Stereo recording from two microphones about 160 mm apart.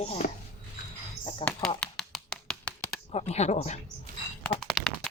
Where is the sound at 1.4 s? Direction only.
35° left (ahead or behind).